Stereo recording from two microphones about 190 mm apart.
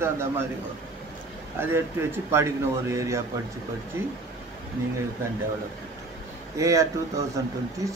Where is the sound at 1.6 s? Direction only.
15° right (ahead or behind).